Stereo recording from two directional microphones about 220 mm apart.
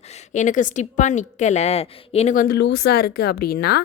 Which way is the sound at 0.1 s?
35° left (ahead or behind).